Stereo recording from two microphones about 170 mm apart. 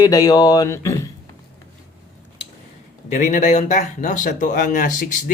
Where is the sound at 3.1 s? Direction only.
45° left (ahead or behind).